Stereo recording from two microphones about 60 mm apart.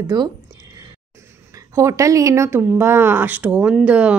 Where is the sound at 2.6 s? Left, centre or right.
Right.